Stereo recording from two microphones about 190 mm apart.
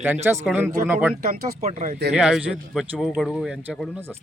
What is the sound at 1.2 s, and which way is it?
Speech, 40° right (ahead or behind).